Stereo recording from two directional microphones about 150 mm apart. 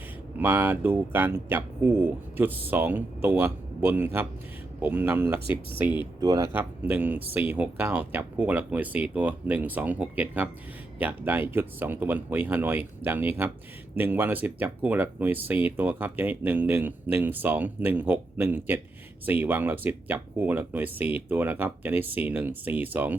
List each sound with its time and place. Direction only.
0.3 s speech: 15° right (ahead or behind)
6.1 s speech: 25° right (ahead or behind)
6.5 s speech: 10° right (ahead or behind)